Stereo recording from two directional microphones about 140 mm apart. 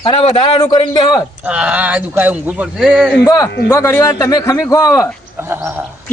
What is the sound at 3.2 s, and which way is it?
A man's voice, 25° left (ahead or behind).